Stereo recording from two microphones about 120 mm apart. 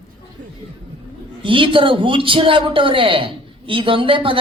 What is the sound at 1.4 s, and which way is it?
A man's voice, 45° right (ahead or behind).